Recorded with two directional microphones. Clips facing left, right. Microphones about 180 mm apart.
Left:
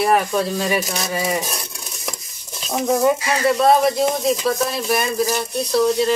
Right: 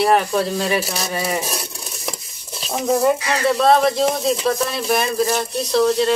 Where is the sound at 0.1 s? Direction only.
Centre (ahead or behind).